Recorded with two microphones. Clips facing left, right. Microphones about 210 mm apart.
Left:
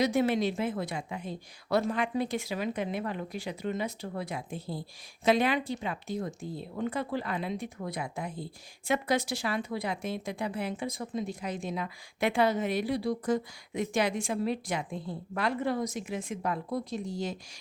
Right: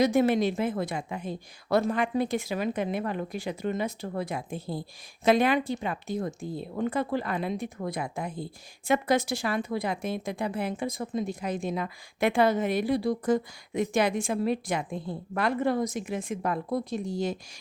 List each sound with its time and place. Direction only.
0.0 s a woman's voice: 50° right (ahead or behind)